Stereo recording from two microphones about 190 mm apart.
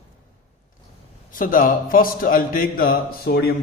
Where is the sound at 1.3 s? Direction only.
45° left (ahead or behind).